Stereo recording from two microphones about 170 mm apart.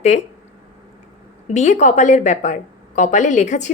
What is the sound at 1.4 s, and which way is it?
A woman's voice, 45° left (ahead or behind).